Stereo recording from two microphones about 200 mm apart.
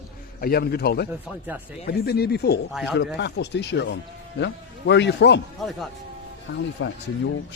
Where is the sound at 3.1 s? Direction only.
60° left (ahead or behind).